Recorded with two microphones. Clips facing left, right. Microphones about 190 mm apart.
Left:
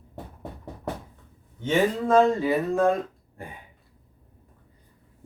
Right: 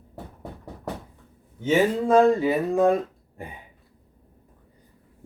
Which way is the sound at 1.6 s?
10° right (ahead or behind).